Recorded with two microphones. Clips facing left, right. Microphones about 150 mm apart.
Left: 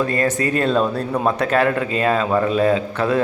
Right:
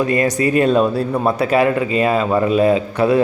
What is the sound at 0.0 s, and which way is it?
A man's voice, 15° right (ahead or behind).